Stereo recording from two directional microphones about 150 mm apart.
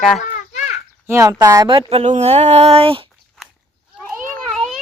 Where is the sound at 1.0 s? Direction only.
20° right (ahead or behind).